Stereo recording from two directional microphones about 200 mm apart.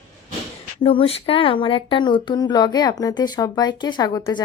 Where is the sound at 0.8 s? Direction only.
25° left (ahead or behind).